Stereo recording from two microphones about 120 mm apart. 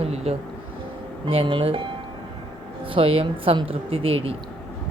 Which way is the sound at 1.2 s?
50° right (ahead or behind).